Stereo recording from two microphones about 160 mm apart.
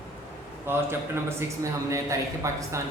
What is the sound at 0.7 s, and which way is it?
Speech, 15° right (ahead or behind).